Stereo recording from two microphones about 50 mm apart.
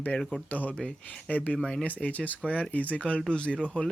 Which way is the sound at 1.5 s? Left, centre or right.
Centre.